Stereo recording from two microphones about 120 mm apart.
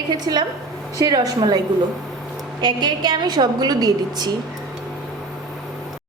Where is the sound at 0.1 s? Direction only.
35° right (ahead or behind).